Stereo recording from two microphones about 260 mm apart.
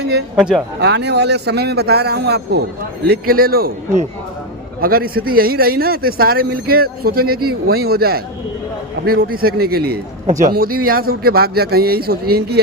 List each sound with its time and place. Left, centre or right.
0.3 s speech: centre
0.8 s a man's voice: right